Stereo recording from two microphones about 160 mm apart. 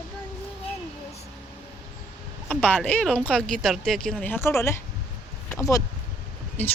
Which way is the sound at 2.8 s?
5° left (ahead or behind).